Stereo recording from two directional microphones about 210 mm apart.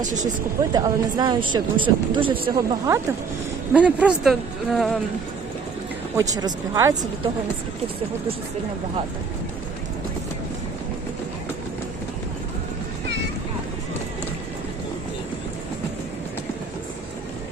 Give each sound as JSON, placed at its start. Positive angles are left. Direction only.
{"t": 0.0, "sound": "speech", "side_deg": -35}
{"t": 0.7, "sound": "speech", "side_deg": -20}
{"t": 3.7, "sound": "speech", "side_deg": -5}
{"t": 6.1, "sound": "speech", "side_deg": -15}